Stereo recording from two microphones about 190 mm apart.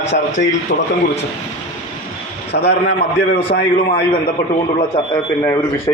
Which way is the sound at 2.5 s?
55° left (ahead or behind).